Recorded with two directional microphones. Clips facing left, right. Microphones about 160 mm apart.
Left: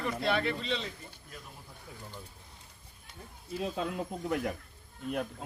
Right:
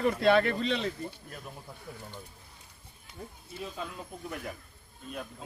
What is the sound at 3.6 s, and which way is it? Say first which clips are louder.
Speech: left 5 dB; 75° left (ahead or behind).